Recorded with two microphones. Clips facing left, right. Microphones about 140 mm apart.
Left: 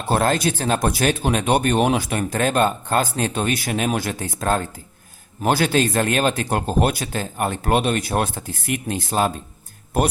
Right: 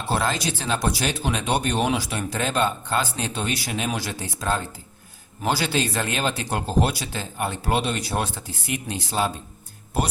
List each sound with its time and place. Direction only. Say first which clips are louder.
0.1 s speech: left 6 dB; 50° left (ahead or behind)